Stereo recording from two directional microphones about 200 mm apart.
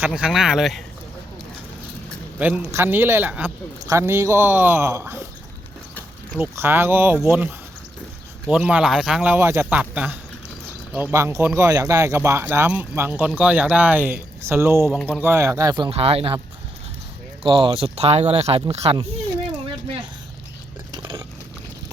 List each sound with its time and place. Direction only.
0.0 s speech: 5° right (ahead or behind)
2.4 s speech: 10° right (ahead or behind)
6.3 s speech: 10° right (ahead or behind)
14.8 s speech: 5° right (ahead or behind); by 16.4 s 30° right (ahead or behind)
17.4 s speech: 25° right (ahead or behind)
20.9 s biting: 25° right (ahead or behind)